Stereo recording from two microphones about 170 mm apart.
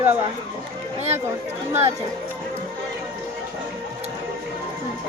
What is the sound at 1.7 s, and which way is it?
Speech, 15° right (ahead or behind).